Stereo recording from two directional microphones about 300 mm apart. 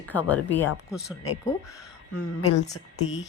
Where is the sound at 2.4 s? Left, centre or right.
Left.